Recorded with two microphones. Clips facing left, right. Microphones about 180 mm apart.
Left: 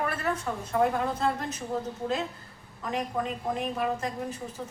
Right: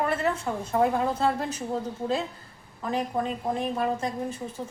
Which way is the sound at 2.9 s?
30° right (ahead or behind).